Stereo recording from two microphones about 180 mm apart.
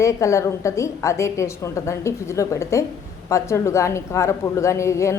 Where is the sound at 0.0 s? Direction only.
15° left (ahead or behind).